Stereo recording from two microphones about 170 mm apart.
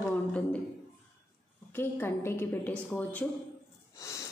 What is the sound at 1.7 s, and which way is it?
A woman's voice, 15° left (ahead or behind).